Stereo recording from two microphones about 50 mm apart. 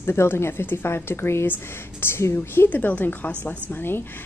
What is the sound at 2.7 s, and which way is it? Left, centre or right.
Speech, left.